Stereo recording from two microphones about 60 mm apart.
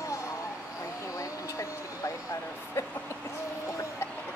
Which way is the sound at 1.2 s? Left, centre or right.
Left.